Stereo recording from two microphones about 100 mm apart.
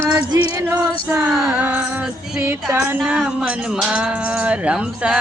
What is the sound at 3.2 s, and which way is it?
Speech, 10° right (ahead or behind).